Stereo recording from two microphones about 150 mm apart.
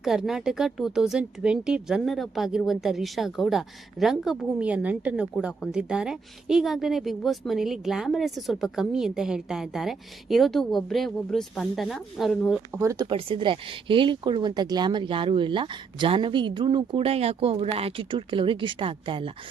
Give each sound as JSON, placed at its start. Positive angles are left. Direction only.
{"t": 0.0, "sound": "speech", "side_deg": 0}
{"t": 12.7, "sound": "speech", "side_deg": -20}
{"t": 13.1, "sound": "speech", "side_deg": -35}